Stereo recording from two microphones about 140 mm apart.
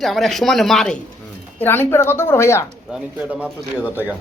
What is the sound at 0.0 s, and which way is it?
Speech, centre (ahead or behind).